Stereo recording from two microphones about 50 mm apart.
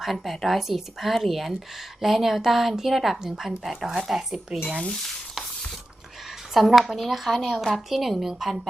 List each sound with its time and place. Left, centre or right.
0.0 s speech: centre
6.5 s speech: centre